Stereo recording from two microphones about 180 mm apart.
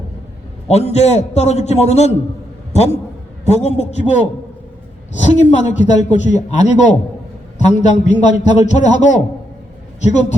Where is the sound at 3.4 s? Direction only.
40° left (ahead or behind).